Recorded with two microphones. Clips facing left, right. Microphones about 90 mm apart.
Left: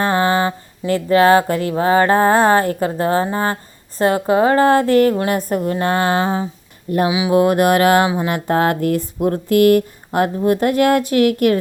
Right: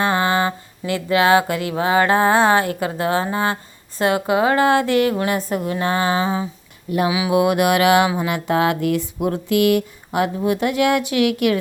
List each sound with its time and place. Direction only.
0.0 s a sound: 35° left (ahead or behind)
1.8 s speech: 35° left (ahead or behind)
7.1 s speech: 20° left (ahead or behind)
7.3 s speech: 40° left (ahead or behind)